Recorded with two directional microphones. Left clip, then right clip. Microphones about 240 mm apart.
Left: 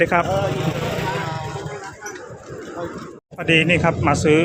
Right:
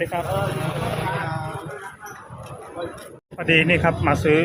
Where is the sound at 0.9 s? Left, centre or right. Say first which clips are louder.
Left 2 dB; left.